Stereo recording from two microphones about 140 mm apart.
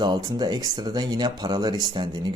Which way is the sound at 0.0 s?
30° right (ahead or behind).